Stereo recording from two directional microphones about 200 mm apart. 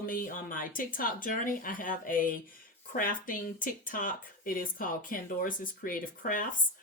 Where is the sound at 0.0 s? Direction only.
45° left (ahead or behind).